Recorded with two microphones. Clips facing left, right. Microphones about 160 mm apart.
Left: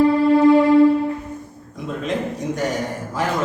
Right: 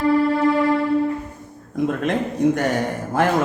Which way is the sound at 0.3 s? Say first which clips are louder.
Left 6 dB; 20° left (ahead or behind).